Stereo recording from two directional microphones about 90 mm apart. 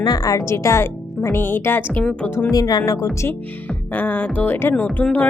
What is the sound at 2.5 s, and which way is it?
Speech, 45° left (ahead or behind).